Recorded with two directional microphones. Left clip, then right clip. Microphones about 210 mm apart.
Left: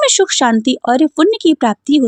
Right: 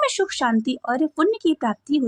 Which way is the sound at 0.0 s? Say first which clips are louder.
Left 9 dB; 30° left (ahead or behind).